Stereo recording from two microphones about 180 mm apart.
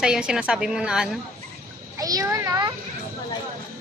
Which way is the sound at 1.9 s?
20° right (ahead or behind).